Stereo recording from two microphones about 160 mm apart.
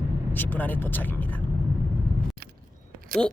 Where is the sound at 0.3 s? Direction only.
10° left (ahead or behind).